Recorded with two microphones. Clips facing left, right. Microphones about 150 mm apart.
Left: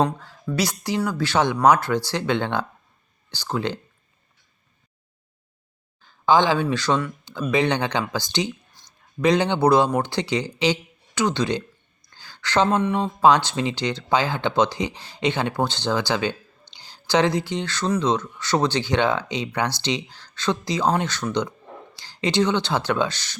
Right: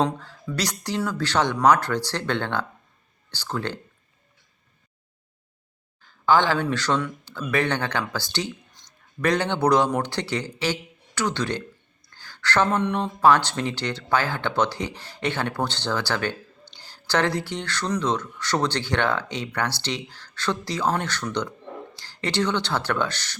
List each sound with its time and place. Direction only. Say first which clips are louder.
0.5 s speech: left 3 dB; 10° left (ahead or behind)
6.2 s speech: left 2 dB; 15° left (ahead or behind)
12.1 s a sound: left 2 dB; 15° left (ahead or behind)
12.8 s speech: left 2 dB; 5° left (ahead or behind)
13.2 s speech: left 1 dB; 15° left (ahead or behind)